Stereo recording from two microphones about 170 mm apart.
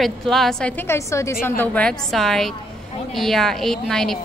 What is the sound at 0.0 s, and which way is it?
A woman's voice, centre (ahead or behind).